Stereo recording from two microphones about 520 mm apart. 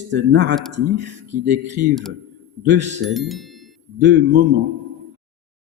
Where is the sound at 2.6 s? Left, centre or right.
Centre.